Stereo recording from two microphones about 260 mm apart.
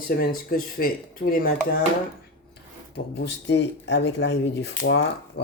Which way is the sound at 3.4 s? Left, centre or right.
Left.